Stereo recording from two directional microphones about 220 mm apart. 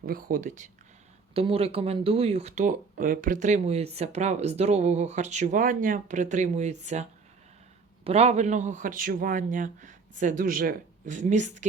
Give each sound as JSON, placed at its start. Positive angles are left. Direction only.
{"t": 0.0, "sound": "speech", "side_deg": -40}
{"t": 1.3, "sound": "speech", "side_deg": -25}